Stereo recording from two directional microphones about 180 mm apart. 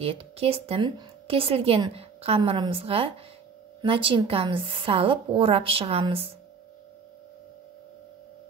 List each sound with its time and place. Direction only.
0.0 s a woman's voice: 30° right (ahead or behind)